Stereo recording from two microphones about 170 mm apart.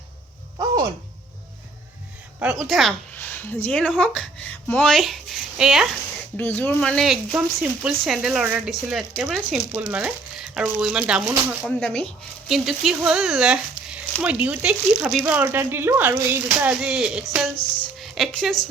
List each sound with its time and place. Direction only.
2.4 s speech: 5° right (ahead or behind)
3.2 s speech: 10° left (ahead or behind); by 5.9 s 5° right (ahead or behind)
6.3 s speech: 10° left (ahead or behind); by 11.3 s 5° right (ahead or behind)
11.8 s speech: 10° left (ahead or behind)